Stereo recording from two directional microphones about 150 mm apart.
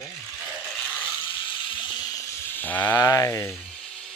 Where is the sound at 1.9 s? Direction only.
20° left (ahead or behind).